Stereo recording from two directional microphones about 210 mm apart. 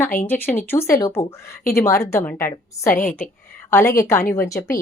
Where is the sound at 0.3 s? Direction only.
10° left (ahead or behind).